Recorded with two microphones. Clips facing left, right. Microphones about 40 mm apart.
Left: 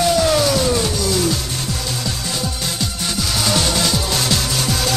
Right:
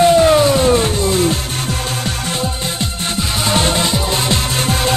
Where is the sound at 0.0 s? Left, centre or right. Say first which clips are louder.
Right 6 dB; right.